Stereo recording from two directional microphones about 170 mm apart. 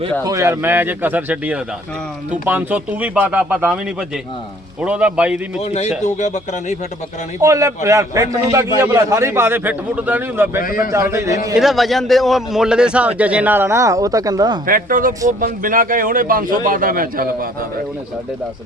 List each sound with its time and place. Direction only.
0.3 s a man's voice: 15° right (ahead or behind)
4.8 s a man's voice: 5° right (ahead or behind)
5.5 s speech: 40° left (ahead or behind)
7.3 s a man's voice: 20° right (ahead or behind)
10.6 s a man's voice: 55° left (ahead or behind)
10.9 s a man's voice: 15° right (ahead or behind)
11.5 s a man's voice: centre (ahead or behind); by 14.6 s 25° right (ahead or behind)
14.7 s a man's voice: 55° right (ahead or behind)